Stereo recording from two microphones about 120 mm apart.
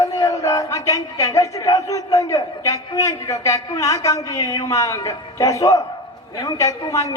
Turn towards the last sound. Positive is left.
turn(degrees=30)  # may be behind; listen again after turning